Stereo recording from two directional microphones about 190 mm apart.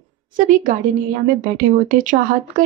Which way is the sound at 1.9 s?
45° right (ahead or behind).